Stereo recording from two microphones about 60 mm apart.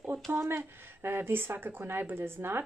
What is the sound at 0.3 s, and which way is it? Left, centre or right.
Speech, right.